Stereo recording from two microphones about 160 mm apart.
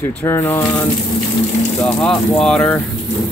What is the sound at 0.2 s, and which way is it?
Speech, 20° left (ahead or behind).